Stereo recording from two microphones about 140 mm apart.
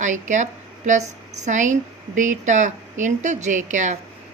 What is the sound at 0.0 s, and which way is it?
Speech, 60° right (ahead or behind).